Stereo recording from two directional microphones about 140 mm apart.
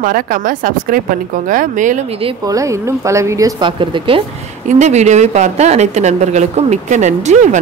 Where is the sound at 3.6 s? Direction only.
35° right (ahead or behind).